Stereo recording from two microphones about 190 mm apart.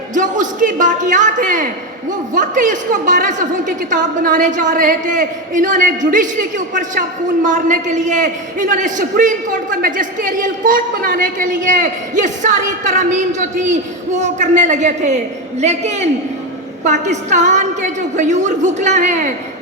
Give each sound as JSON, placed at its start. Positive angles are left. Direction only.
{"t": 0.1, "sound": "a man's voice", "side_deg": -40}
{"t": 7.4, "sound": "a man's voice", "side_deg": -40}